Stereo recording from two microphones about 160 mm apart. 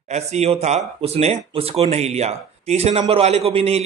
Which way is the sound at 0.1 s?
45° right (ahead or behind).